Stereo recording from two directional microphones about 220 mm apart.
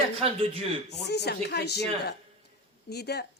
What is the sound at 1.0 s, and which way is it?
Speech, 50° left (ahead or behind).